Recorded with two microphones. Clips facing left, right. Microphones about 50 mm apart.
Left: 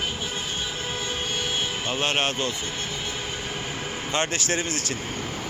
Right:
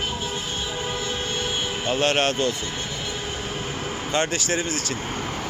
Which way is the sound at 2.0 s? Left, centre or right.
Centre.